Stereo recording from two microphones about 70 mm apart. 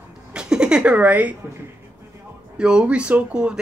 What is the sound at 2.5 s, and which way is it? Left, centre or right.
Speech, centre.